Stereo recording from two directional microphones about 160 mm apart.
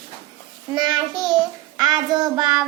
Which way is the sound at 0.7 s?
30° right (ahead or behind).